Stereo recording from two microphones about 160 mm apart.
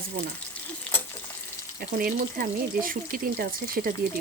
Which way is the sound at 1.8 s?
65° right (ahead or behind).